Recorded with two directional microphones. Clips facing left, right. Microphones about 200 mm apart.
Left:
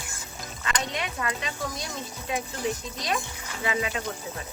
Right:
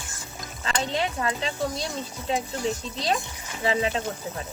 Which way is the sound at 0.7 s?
30° right (ahead or behind).